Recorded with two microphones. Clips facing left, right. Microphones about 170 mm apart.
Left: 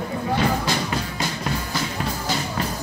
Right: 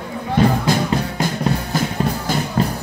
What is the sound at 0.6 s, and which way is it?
Music, 50° right (ahead or behind).